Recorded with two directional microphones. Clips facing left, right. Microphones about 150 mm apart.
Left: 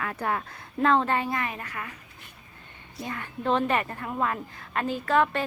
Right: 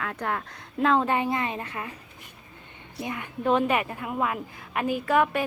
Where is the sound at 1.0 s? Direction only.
15° right (ahead or behind).